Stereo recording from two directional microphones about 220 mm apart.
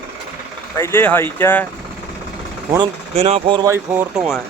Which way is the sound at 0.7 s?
10° left (ahead or behind).